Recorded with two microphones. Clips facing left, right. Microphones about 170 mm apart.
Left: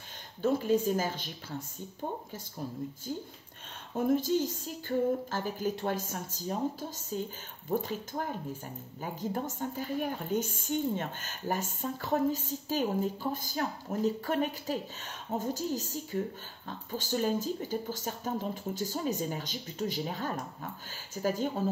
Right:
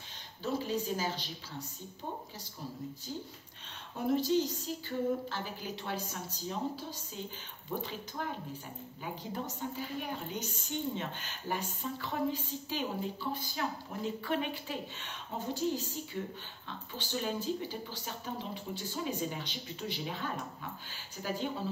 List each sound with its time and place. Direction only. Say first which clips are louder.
0.4 s a woman's voice: left 7 dB; 50° left (ahead or behind)
4.1 s a woman's voice: even; 45° left (ahead or behind)